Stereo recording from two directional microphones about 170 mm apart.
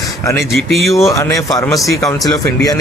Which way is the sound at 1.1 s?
20° left (ahead or behind).